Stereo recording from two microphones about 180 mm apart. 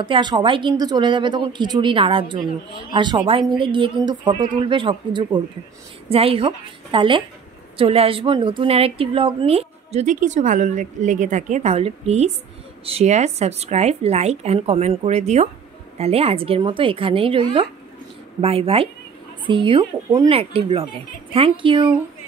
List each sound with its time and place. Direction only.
0.0 s speech: 25° right (ahead or behind)